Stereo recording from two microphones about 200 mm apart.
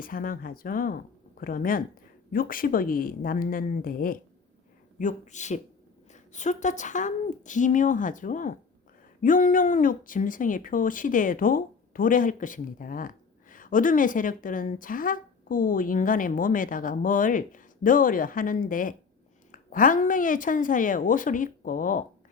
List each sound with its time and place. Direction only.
0.0 s a woman's voice: 45° left (ahead or behind)